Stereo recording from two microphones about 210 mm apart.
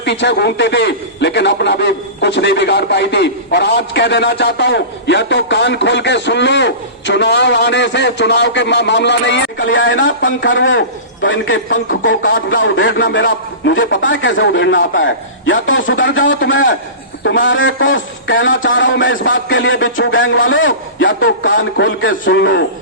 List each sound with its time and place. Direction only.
0.0 s a man's voice: 55° left (ahead or behind)